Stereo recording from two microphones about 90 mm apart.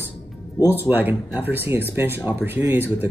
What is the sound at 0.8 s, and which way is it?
Speech, 20° right (ahead or behind).